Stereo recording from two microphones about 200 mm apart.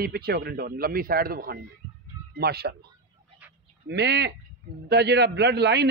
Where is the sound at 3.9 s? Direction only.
55° right (ahead or behind).